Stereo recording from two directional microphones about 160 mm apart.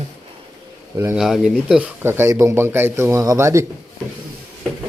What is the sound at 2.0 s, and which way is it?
A man's voice, 15° right (ahead or behind).